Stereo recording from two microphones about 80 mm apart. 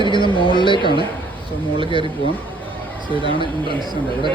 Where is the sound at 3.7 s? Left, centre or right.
Right.